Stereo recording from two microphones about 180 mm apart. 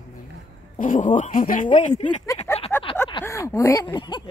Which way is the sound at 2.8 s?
30° left (ahead or behind).